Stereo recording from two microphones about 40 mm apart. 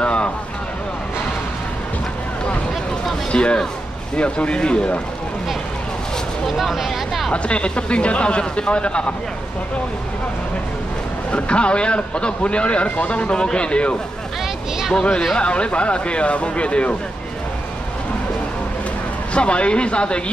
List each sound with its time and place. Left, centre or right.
0.0 s a sound: left
3.3 s a sound: left
4.2 s a man's voice: left
6.4 s speech: centre
7.3 s a man's voice: left
11.3 s a man's voice: left
13.3 s a man's voice: left
15.3 s a man's voice: left
19.3 s a man's voice: left